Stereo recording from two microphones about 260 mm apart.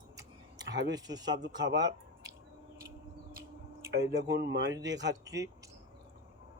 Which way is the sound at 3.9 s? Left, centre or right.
Right.